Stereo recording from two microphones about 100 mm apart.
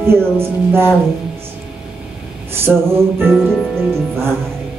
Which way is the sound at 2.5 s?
25° right (ahead or behind).